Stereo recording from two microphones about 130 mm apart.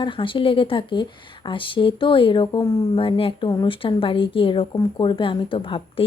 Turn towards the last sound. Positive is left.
turn(degrees=45)  # may be behind; listen again after turning